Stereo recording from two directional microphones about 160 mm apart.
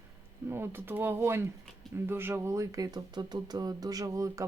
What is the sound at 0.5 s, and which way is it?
Speech, 15° right (ahead or behind).